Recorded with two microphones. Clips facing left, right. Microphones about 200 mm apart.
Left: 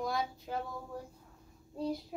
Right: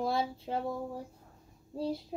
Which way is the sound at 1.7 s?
30° right (ahead or behind).